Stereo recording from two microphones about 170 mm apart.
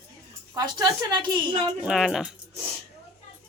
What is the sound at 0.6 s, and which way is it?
Speech, 25° right (ahead or behind).